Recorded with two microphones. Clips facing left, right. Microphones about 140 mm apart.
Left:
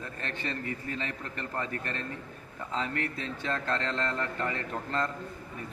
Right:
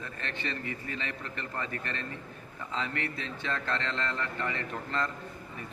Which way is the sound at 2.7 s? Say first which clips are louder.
Left 2 dB; 45° left (ahead or behind).